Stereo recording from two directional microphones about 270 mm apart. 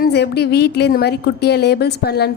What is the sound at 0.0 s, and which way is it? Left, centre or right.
A woman's voice, left.